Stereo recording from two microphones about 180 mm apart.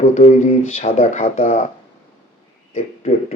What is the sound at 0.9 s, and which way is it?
Speech, 50° left (ahead or behind).